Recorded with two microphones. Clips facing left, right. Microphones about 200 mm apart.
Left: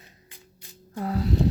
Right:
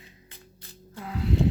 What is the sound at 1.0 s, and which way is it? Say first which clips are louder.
Speech: left 2 dB; 40° left (ahead or behind).